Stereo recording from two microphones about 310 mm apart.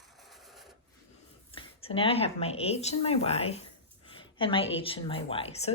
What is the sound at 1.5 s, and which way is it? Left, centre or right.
A woman's voice, centre.